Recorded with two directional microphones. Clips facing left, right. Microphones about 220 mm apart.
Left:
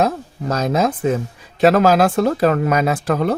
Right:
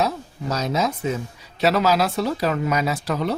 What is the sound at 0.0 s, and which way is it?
Speech, 50° left (ahead or behind).